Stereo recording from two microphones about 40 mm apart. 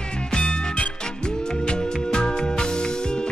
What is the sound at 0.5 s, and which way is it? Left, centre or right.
Music, left.